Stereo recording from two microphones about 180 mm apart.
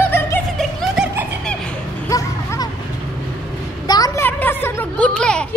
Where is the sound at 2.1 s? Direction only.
20° left (ahead or behind).